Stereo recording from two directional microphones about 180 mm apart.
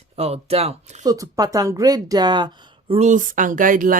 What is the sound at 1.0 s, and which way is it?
Speech, 20° right (ahead or behind).